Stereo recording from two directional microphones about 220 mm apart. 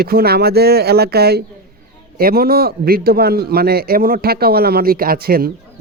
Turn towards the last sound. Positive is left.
turn(degrees=-45)  # may be behind; listen again after turning